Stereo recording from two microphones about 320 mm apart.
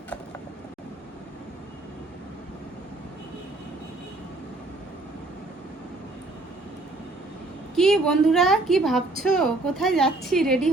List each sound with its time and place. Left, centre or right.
7.8 s a woman's voice: centre